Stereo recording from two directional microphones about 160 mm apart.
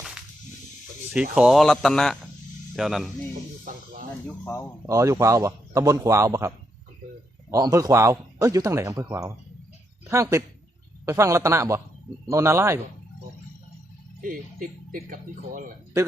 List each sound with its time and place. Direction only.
1.1 s speech: 5° right (ahead or behind)
3.6 s speech: 55° right (ahead or behind)
4.4 s speech: 10° left (ahead or behind)
4.9 s a man's voice: 20° right (ahead or behind)
7.5 s a man's voice: 20° right (ahead or behind)
14.2 s speech: 60° right (ahead or behind)